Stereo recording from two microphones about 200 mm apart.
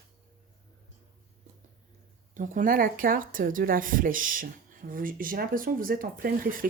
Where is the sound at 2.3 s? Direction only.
40° right (ahead or behind).